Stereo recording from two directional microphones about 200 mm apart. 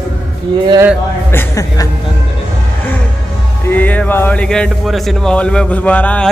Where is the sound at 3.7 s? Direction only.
10° left (ahead or behind).